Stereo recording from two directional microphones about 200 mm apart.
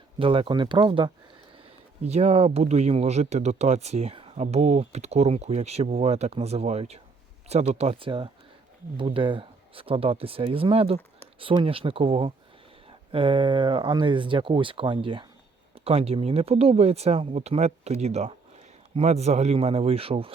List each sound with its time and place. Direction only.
0.2 s speech: 25° right (ahead or behind)